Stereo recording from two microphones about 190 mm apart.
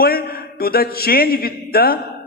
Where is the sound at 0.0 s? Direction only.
50° left (ahead or behind).